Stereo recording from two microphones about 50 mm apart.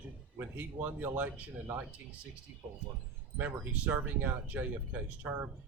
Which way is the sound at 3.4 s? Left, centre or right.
Right.